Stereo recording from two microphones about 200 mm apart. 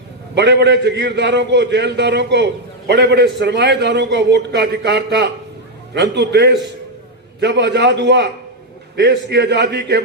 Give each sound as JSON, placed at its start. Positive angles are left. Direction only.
{"t": 0.3, "sound": "a man's voice", "side_deg": -60}